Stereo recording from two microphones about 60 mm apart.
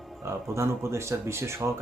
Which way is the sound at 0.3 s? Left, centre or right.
Right.